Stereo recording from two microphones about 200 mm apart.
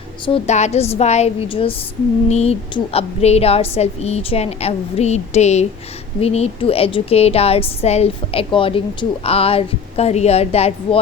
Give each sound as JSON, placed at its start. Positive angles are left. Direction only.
{"t": 0.3, "sound": "a woman's voice", "side_deg": 35}